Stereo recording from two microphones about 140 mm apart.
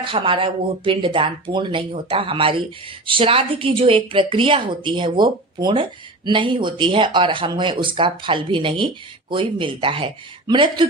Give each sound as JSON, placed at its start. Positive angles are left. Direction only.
{"t": 0.0, "sound": "a woman's voice", "side_deg": -40}